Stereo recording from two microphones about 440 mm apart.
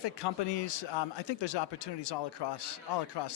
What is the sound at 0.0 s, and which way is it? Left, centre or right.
Speech, left.